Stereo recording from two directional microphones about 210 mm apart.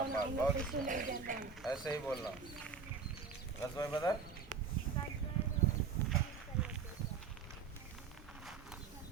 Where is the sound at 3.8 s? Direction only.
20° left (ahead or behind).